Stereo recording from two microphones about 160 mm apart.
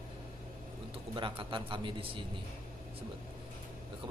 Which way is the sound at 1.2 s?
30° right (ahead or behind).